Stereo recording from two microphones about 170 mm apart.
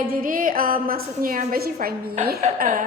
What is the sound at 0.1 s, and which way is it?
A woman's voice, 55° right (ahead or behind).